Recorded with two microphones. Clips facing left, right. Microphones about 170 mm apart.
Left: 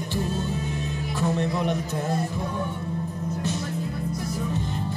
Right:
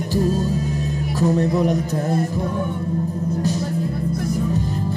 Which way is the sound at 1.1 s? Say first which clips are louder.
Right 7 dB; 40° right (ahead or behind).